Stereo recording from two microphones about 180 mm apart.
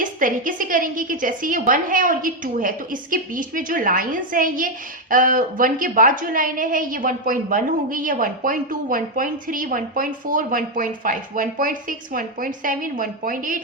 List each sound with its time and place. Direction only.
0.0 s a woman's voice: 50° right (ahead or behind)